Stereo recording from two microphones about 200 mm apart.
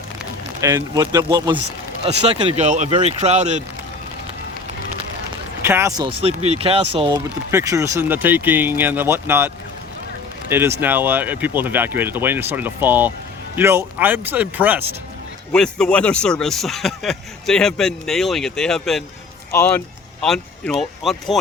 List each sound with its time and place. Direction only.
0.6 s speech: 15° right (ahead or behind); by 3.6 s 35° right (ahead or behind)
5.6 s speech: 10° right (ahead or behind)
6.0 s speech: 30° right (ahead or behind)
7.5 s speech: 15° right (ahead or behind)
10.5 s speech: 10° right (ahead or behind)
15.5 s speech: 5° left (ahead or behind)